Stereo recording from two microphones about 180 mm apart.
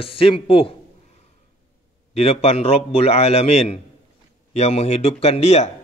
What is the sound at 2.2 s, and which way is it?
A man's voice, 35° left (ahead or behind).